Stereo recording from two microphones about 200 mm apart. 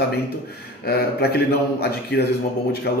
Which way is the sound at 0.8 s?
50° left (ahead or behind).